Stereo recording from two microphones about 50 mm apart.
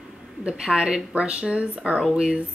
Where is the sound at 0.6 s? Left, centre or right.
Centre.